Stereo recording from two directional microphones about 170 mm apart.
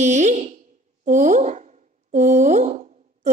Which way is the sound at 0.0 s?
45° right (ahead or behind).